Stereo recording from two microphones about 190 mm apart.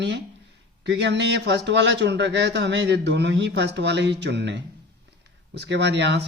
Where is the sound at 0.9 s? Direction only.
65° right (ahead or behind).